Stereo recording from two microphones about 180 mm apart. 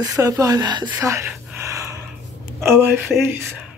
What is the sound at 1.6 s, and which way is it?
Gasp, 15° right (ahead or behind).